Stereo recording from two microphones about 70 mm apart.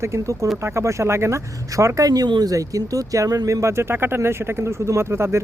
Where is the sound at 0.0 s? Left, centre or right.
Right.